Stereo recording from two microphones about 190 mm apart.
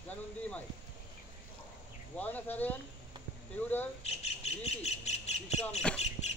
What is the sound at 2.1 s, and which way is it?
Speech, 10° left (ahead or behind).